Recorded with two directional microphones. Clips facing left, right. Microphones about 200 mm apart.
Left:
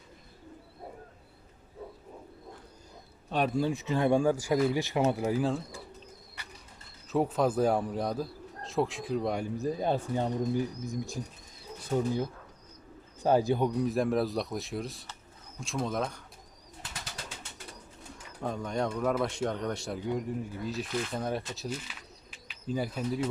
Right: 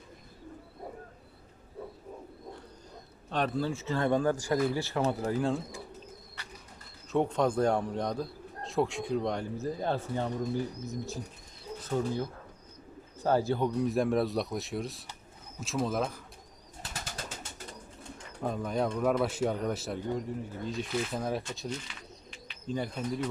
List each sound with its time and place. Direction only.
3.2 s a man's voice: 10° left (ahead or behind)
5.2 s a man's voice: 5° left (ahead or behind)
7.1 s a man's voice: 5° left (ahead or behind)
13.2 s a man's voice: 15° left (ahead or behind)
13.7 s a man's voice: centre (ahead or behind)
16.8 s bird: 45° right (ahead or behind)
18.4 s a man's voice: 5° right (ahead or behind)